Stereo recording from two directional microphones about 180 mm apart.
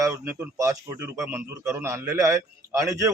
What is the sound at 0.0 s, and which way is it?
A man's voice, 15° right (ahead or behind).